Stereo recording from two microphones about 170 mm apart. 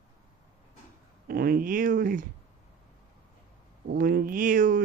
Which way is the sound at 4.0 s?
55° right (ahead or behind).